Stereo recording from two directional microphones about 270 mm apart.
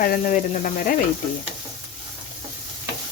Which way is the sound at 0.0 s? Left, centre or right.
Left.